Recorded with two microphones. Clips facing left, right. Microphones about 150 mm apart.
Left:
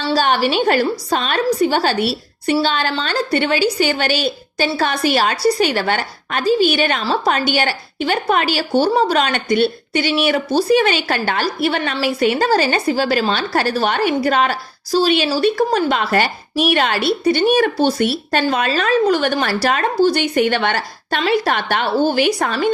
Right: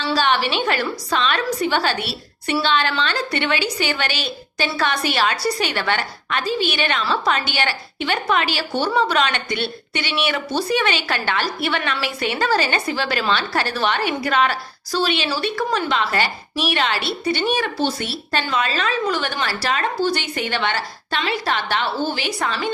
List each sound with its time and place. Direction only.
0.0 s a woman's voice: 40° left (ahead or behind)